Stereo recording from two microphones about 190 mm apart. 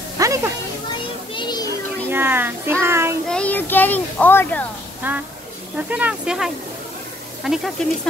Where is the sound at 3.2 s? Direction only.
5° left (ahead or behind).